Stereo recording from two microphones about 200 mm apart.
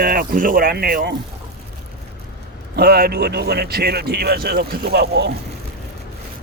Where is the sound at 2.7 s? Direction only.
50° right (ahead or behind).